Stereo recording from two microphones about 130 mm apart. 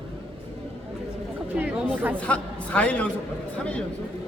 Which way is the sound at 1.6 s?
15° right (ahead or behind).